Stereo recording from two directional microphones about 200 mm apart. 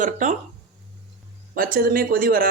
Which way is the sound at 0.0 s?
40° right (ahead or behind).